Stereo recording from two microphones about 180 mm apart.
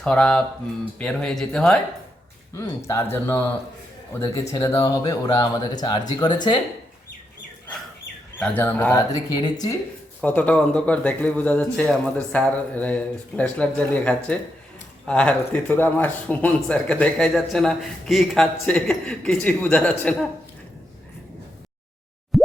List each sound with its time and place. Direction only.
0.0 s speech: 5° left (ahead or behind)
2.5 s speech: 15° left (ahead or behind)
8.4 s speech: 10° left (ahead or behind)
10.2 s speech: 10° left (ahead or behind)
22.3 s plop: centre (ahead or behind)